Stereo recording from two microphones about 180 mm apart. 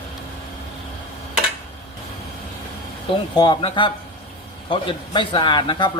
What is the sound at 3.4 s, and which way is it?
Speech, 25° left (ahead or behind).